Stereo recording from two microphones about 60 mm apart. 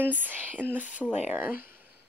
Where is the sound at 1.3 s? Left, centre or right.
Right.